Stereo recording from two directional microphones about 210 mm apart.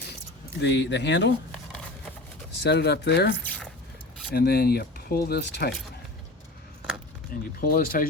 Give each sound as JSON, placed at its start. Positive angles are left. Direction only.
{"t": 0.6, "sound": "speech", "side_deg": 55}
{"t": 2.5, "sound": "speech", "side_deg": 55}
{"t": 7.6, "sound": "speech", "side_deg": 45}